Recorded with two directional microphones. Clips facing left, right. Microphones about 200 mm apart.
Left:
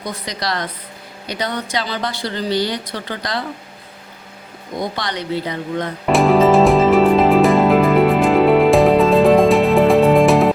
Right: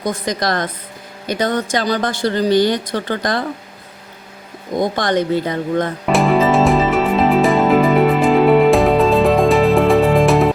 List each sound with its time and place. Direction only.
0.0 s a woman's voice: 45° right (ahead or behind)
4.8 s a woman's voice: 50° right (ahead or behind)
6.1 s music: centre (ahead or behind)